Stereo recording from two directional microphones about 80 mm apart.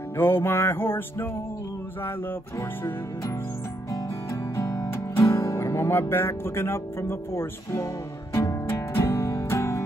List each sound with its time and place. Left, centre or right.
0.2 s music: left
4.6 s music: left